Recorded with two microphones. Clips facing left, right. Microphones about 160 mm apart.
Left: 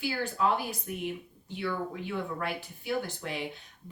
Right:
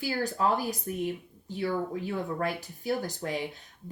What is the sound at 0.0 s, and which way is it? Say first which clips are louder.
Speech: right 1 dB; 40° right (ahead or behind).